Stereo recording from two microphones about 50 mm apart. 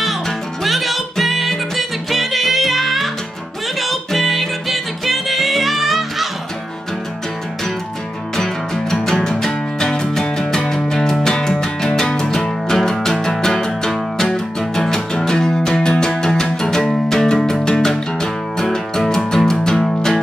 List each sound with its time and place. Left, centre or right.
0.7 s music: centre
8.4 s music: centre